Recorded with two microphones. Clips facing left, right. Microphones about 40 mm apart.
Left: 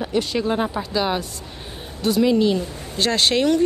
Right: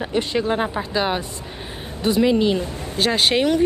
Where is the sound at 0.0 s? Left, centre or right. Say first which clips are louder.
Even; right.